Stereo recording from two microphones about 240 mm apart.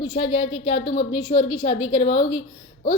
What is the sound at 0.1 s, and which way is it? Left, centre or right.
A woman's voice, left.